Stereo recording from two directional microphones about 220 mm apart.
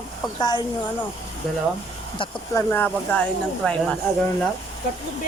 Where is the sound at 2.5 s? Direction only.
10° left (ahead or behind).